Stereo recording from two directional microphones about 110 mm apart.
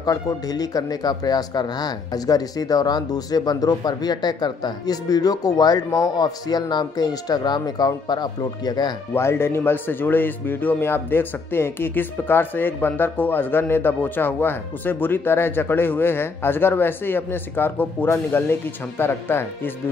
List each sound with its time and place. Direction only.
0.0 s speech: 35° left (ahead or behind)
9.1 s speech: 20° left (ahead or behind)